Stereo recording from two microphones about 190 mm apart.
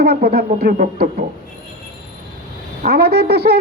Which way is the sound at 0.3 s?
55° right (ahead or behind).